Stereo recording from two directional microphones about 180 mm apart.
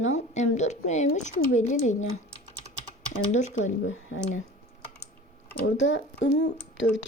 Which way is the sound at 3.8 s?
90° left.